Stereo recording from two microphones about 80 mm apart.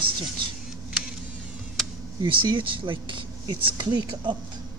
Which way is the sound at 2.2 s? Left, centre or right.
Right.